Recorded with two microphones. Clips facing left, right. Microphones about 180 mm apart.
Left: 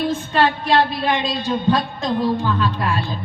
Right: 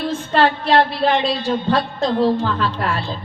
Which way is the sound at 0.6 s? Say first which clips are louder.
Right 2 dB; 15° left (ahead or behind).